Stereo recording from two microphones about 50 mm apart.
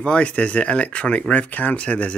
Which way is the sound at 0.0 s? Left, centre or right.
Left.